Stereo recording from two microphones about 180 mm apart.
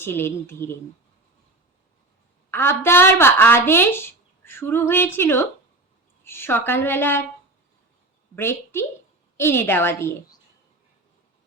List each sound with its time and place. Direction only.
0.0 s a woman's voice: 10° left (ahead or behind)
2.5 s a woman's voice: 15° left (ahead or behind)
8.4 s a woman's voice: 15° left (ahead or behind)